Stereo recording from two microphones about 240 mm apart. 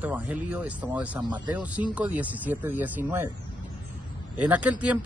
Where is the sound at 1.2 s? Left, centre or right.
Centre.